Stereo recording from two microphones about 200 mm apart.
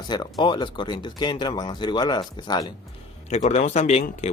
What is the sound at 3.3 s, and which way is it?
Speech, 35° left (ahead or behind).